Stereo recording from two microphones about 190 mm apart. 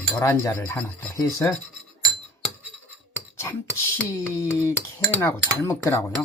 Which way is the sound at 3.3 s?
15° left (ahead or behind).